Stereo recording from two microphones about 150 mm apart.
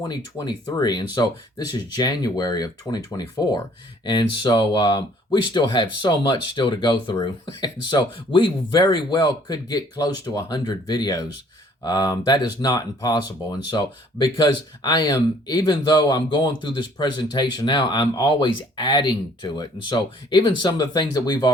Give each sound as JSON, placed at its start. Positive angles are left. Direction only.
{"t": 0.1, "sound": "speech", "side_deg": 25}